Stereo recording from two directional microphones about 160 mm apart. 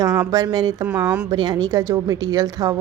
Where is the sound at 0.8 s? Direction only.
5° right (ahead or behind).